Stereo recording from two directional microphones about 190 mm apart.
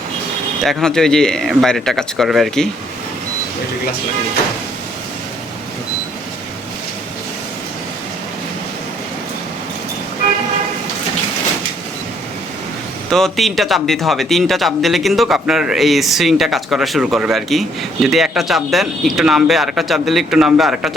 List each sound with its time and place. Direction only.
0.6 s speech: centre (ahead or behind)
13.1 s speech: centre (ahead or behind)